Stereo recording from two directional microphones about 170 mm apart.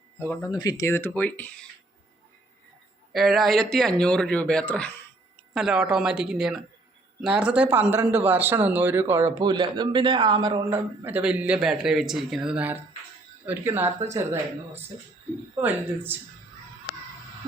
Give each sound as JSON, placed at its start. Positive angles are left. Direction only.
{"t": 0.2, "sound": "speech", "side_deg": 20}
{"t": 3.1, "sound": "a man's voice", "side_deg": 0}
{"t": 5.5, "sound": "a man's voice", "side_deg": -5}
{"t": 10.7, "sound": "a man's voice", "side_deg": -10}